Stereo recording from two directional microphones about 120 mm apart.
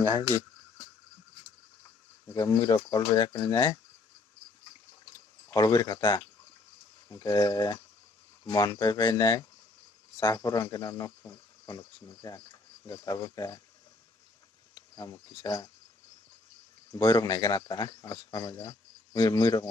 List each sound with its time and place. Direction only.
2.3 s speech: 30° left (ahead or behind)
5.1 s a sound: 35° left (ahead or behind)
7.1 s speech: 30° left (ahead or behind)
15.4 s speech: 35° left (ahead or behind)
16.9 s speech: 30° left (ahead or behind)